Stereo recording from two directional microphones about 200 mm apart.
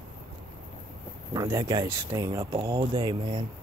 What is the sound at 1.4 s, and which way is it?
Speech, 15° right (ahead or behind).